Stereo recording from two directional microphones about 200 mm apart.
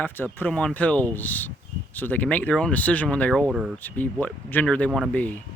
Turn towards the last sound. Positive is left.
turn(degrees=10)  # may be behind; listen again after turning